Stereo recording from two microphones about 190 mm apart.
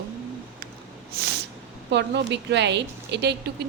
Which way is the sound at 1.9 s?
65° right (ahead or behind).